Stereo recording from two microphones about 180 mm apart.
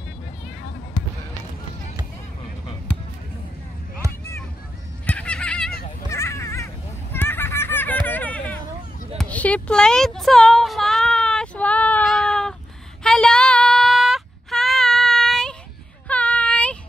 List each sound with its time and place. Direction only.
5.0 s a sound: 10° left (ahead or behind)
13.0 s female singing: 5° left (ahead or behind)
16.1 s child singing: 5° left (ahead or behind)